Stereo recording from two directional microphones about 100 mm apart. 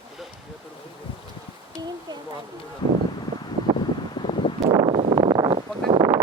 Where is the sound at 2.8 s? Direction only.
50° left (ahead or behind).